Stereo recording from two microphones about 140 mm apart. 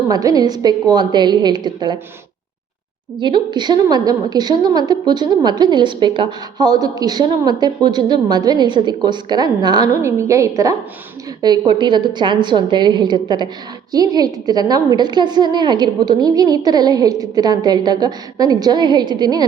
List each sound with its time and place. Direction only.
0.1 s a woman's voice: 25° right (ahead or behind)
3.2 s a woman's voice: 35° right (ahead or behind)